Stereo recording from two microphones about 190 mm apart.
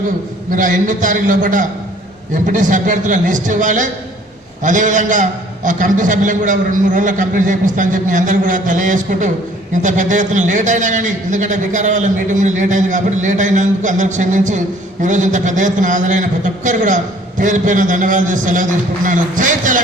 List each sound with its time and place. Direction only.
0.5 s a man's voice: 45° right (ahead or behind)